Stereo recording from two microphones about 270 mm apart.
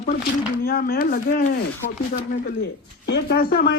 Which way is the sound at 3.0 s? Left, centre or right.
Left.